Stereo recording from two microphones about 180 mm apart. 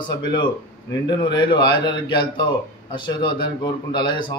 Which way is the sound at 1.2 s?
25° left (ahead or behind).